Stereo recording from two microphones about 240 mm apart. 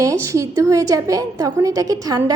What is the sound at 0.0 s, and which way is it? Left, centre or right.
A woman's voice, centre.